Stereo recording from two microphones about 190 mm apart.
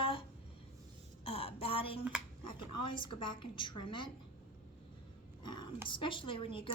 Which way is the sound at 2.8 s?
25° left (ahead or behind).